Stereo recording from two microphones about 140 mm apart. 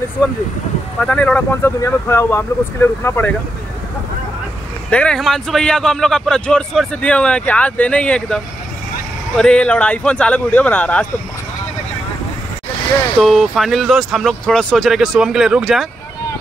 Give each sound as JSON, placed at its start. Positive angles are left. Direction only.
{"t": 1.0, "sound": "a man's voice", "side_deg": 10}
{"t": 4.9, "sound": "a man's voice", "side_deg": 5}
{"t": 9.4, "sound": "a man's voice", "side_deg": 5}
{"t": 13.2, "sound": "speech", "side_deg": 0}